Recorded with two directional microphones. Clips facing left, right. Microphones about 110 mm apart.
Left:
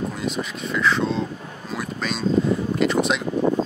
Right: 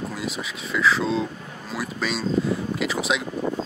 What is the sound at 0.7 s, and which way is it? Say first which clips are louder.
Speech: even; centre (ahead or behind).